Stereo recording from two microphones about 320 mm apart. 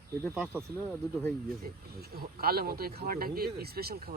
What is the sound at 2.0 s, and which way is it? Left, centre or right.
Speech, right.